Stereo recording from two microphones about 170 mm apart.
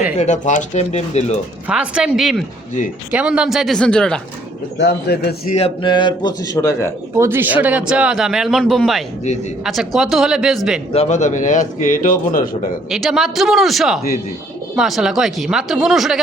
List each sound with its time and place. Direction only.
0.2 s speech: 45° left (ahead or behind)
1.6 s a man's voice: 5° right (ahead or behind)
4.8 s speech: 70° left (ahead or behind)
5.5 s a man's voice: 30° left (ahead or behind)
7.2 s a man's voice: 15° right (ahead or behind)
10.9 s a man's voice: 40° left (ahead or behind)
12.9 s a man's voice: centre (ahead or behind)